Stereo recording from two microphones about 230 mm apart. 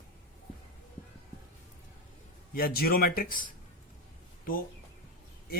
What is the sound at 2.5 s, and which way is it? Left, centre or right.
Speech, left.